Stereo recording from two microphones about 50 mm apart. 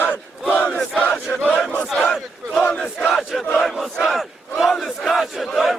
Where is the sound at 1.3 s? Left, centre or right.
Left.